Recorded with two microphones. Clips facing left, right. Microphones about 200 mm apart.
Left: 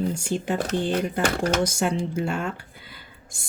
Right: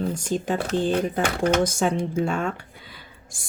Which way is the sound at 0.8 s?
45° right (ahead or behind).